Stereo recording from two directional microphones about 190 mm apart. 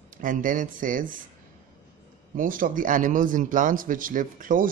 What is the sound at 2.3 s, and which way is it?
Speech, 45° right (ahead or behind).